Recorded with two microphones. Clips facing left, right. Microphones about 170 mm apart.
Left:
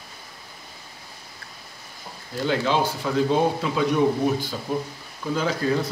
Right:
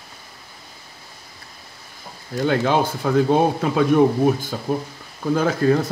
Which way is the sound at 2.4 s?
55° right (ahead or behind).